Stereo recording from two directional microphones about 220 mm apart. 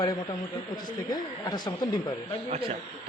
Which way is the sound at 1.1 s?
20° left (ahead or behind).